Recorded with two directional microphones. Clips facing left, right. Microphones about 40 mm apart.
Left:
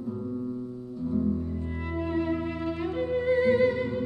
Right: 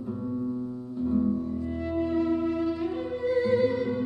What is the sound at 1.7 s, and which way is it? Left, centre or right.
Music, left.